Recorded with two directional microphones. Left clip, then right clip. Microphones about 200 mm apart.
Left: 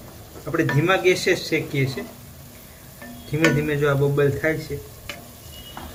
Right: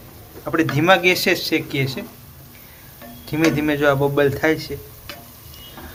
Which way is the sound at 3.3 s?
55° right (ahead or behind).